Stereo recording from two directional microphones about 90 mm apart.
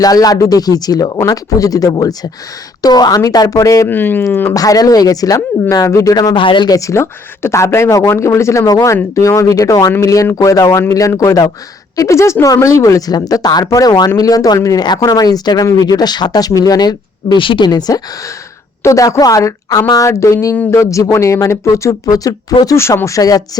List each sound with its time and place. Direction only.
0.0 s speech: 45° left (ahead or behind)
3.8 s speech: 20° left (ahead or behind)
4.5 s speech: 45° left (ahead or behind)
6.3 s speech: 65° left (ahead or behind)
6.7 s speech: 40° left (ahead or behind)
18.8 s speech: 35° left (ahead or behind)
22.6 s speech: 30° left (ahead or behind)